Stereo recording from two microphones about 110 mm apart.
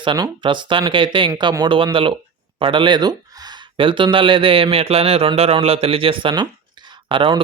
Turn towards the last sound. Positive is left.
turn(degrees=-50)  # may be behind; listen again after turning